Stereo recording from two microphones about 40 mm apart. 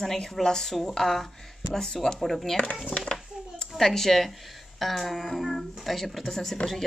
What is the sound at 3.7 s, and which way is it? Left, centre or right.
Speech, centre.